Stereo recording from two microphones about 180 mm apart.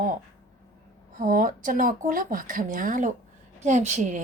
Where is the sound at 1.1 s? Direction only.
50° right (ahead or behind).